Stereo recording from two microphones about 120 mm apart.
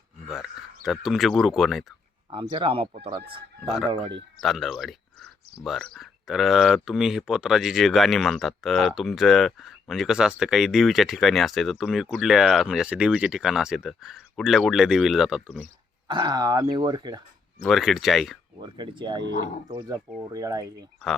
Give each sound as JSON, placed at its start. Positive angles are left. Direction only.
{"t": 0.9, "sound": "speech", "side_deg": 0}
{"t": 2.3, "sound": "speech", "side_deg": -45}
{"t": 4.4, "sound": "speech", "side_deg": 0}
{"t": 16.0, "sound": "speech", "side_deg": -35}
{"t": 17.7, "sound": "speech", "side_deg": 0}
{"t": 18.6, "sound": "speech", "side_deg": -40}